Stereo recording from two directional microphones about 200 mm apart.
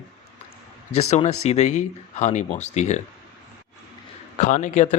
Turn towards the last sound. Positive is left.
turn(degrees=35)  # may be behind; listen again after turning